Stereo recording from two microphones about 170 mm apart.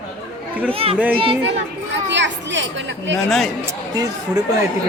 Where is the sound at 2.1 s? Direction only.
90° right.